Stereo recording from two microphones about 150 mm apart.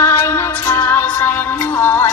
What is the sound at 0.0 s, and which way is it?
Music, 15° left (ahead or behind).